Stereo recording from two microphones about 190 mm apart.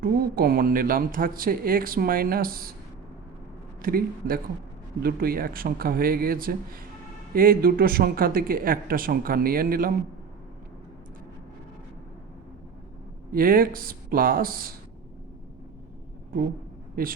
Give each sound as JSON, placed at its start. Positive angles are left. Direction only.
{"t": 0.0, "sound": "speech", "side_deg": -50}
{"t": 3.8, "sound": "speech", "side_deg": -50}
{"t": 13.3, "sound": "speech", "side_deg": -50}